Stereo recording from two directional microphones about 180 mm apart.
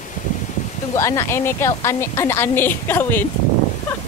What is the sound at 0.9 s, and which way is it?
A woman's voice, 15° left (ahead or behind).